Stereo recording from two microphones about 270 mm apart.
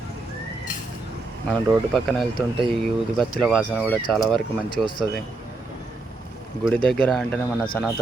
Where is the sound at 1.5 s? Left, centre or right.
Centre.